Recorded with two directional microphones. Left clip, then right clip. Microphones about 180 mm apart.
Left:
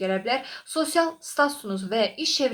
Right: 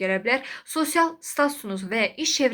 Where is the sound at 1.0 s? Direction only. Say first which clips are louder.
Even; 45° right (ahead or behind).